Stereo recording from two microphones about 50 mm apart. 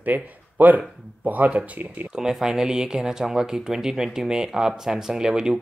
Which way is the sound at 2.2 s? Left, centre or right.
Centre.